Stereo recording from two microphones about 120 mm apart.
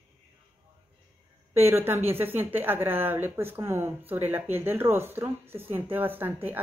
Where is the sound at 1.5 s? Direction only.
20° right (ahead or behind).